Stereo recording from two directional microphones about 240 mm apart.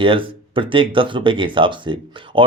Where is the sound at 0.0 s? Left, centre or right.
Right.